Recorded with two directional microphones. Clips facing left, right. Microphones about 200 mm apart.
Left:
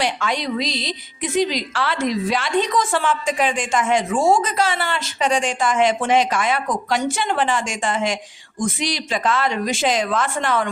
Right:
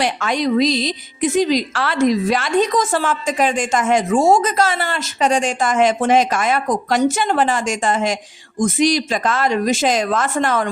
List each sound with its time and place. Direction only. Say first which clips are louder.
0.0 s a woman's voice: right 4 dB; 45° right (ahead or behind)